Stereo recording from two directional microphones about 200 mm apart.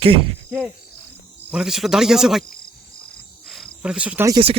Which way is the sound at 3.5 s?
Centre (ahead or behind).